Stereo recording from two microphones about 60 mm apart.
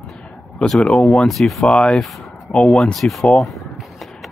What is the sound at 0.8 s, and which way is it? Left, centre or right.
Speech, centre.